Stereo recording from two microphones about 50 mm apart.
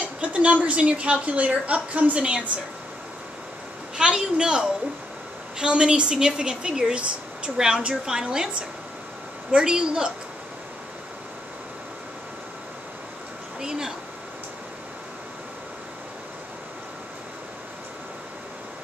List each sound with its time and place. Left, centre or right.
0.0 s a woman's voice: right
3.9 s a woman's voice: centre
9.5 s a woman's voice: centre
13.6 s speech: centre